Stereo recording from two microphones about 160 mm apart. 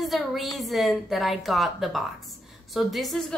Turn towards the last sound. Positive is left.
turn(degrees=0)  # may be behind; listen again after turning